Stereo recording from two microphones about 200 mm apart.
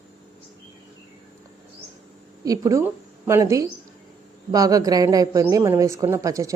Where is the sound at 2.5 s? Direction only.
15° right (ahead or behind).